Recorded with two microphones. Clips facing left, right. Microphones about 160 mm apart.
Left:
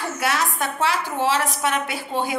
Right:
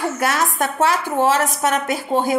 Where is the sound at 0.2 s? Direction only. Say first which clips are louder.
Right 1 dB; 45° right (ahead or behind).